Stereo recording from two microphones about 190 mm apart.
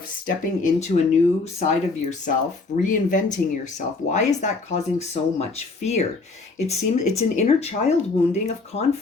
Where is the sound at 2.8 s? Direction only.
40° left (ahead or behind).